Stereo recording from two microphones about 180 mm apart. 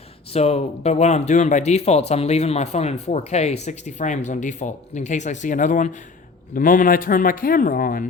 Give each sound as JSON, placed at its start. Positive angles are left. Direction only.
{"t": 0.3, "sound": "a man's voice", "side_deg": 35}